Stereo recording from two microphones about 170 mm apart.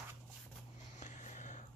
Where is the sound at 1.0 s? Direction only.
45° left (ahead or behind).